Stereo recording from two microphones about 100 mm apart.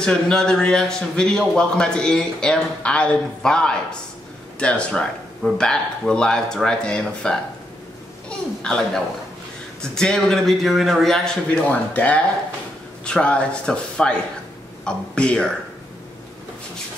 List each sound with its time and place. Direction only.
0.0 s a man's voice: 5° left (ahead or behind)
11.7 s a man's voice: 15° left (ahead or behind)